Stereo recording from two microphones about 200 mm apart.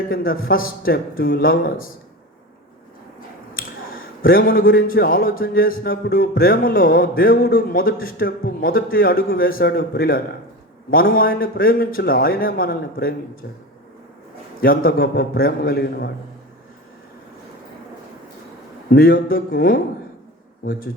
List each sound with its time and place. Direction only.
0.1 s speech: 45° left (ahead or behind)
3.5 s speech: 45° left (ahead or behind)
14.6 s speech: 45° left (ahead or behind)
18.9 s speech: 45° left (ahead or behind)